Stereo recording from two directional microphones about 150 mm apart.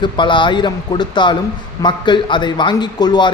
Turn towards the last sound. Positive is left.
turn(degrees=30)  # may be behind; listen again after turning